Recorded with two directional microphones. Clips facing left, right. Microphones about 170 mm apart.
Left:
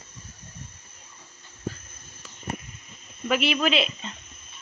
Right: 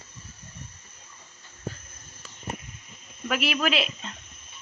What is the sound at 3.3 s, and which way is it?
Speech, centre (ahead or behind).